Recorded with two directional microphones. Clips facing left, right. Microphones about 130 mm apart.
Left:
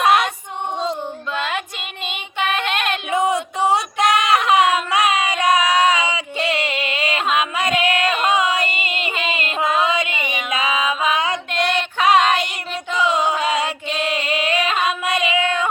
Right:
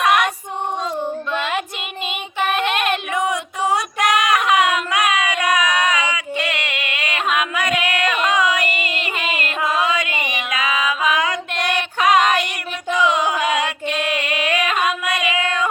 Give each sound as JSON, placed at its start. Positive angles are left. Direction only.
{"t": 0.0, "sound": "female singing", "side_deg": 30}
{"t": 1.3, "sound": "child singing", "side_deg": 0}
{"t": 3.1, "sound": "child singing", "side_deg": 25}
{"t": 9.5, "sound": "music", "side_deg": 25}
{"t": 12.1, "sound": "child singing", "side_deg": 30}
{"t": 13.0, "sound": "music", "side_deg": 30}
{"t": 13.9, "sound": "singing", "side_deg": 30}
{"t": 14.8, "sound": "music", "side_deg": 25}